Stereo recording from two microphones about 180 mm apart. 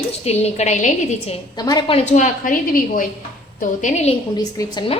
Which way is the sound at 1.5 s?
20° left (ahead or behind).